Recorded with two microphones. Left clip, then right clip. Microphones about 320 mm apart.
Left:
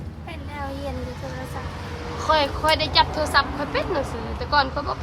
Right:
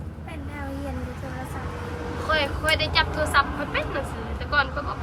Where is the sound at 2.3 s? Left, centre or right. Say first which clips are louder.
Left 4 dB; centre.